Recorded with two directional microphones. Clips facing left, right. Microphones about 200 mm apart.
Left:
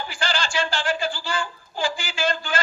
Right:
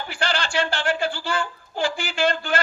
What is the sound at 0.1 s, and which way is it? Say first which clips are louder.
A man's voice: right 3 dB; 60° right (ahead or behind).